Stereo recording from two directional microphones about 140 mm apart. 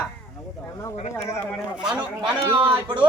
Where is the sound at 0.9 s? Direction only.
55° left (ahead or behind).